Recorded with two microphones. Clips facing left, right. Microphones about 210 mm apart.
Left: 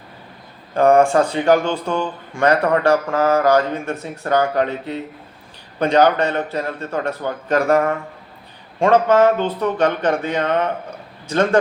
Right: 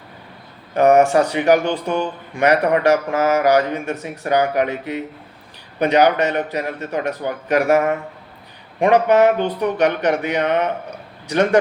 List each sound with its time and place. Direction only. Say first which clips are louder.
0.7 s a man's voice: even; 20° right (ahead or behind)